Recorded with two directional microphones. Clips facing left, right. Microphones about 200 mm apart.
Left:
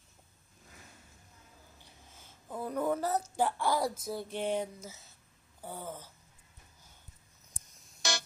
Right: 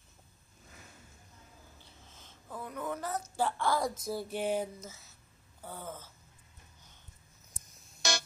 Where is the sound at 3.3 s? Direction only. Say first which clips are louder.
Right 2 dB; 15° left (ahead or behind).